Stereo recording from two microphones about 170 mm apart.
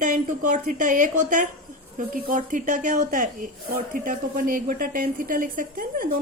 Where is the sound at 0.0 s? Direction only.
50° right (ahead or behind).